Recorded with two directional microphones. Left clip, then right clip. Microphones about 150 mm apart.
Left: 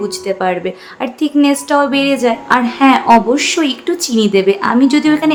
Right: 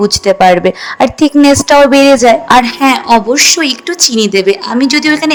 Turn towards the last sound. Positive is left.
turn(degrees=-45)  # may be behind; listen again after turning